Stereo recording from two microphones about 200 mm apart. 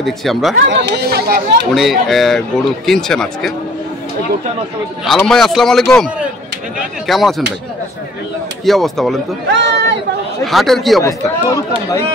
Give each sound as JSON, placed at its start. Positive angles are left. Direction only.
{"t": 0.0, "sound": "a man's voice", "side_deg": 0}
{"t": 0.7, "sound": "speech", "side_deg": -60}
{"t": 1.8, "sound": "a man's voice", "side_deg": 0}
{"t": 5.0, "sound": "a man's voice", "side_deg": 0}
{"t": 7.1, "sound": "a man's voice", "side_deg": 0}
{"t": 8.6, "sound": "a man's voice", "side_deg": 0}
{"t": 9.5, "sound": "speech", "side_deg": -60}
{"t": 10.4, "sound": "a man's voice", "side_deg": 0}
{"t": 11.0, "sound": "speech", "side_deg": 15}